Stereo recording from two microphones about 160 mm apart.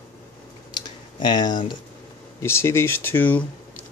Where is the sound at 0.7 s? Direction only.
25° left (ahead or behind).